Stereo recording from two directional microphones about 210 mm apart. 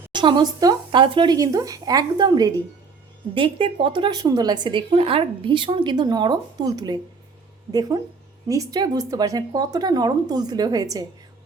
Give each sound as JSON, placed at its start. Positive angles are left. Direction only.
{"t": 0.1, "sound": "a woman's voice", "side_deg": -20}